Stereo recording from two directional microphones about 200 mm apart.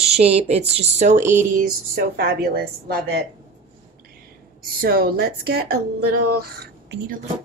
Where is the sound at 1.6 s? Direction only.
45° right (ahead or behind).